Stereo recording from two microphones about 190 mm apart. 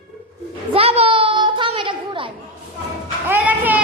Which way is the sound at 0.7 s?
30° right (ahead or behind).